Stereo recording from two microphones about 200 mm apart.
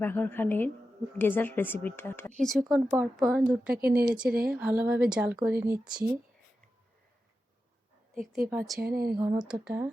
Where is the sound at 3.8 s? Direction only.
50° right (ahead or behind).